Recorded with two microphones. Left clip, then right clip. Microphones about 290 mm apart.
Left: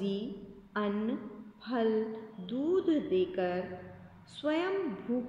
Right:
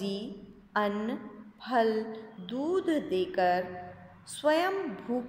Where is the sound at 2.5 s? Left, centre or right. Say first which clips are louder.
Even; right.